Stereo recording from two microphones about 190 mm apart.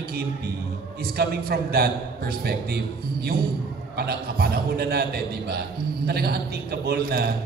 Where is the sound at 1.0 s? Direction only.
55° right (ahead or behind).